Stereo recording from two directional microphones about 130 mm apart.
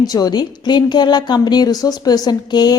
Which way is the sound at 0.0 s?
30° left (ahead or behind).